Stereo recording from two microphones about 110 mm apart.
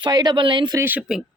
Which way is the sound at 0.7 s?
20° right (ahead or behind).